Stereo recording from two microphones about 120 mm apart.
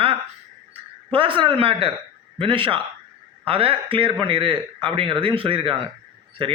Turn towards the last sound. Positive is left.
turn(degrees=-50)  # may be behind; listen again after turning